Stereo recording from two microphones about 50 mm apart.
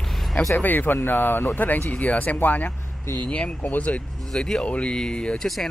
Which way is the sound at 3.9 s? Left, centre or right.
Centre.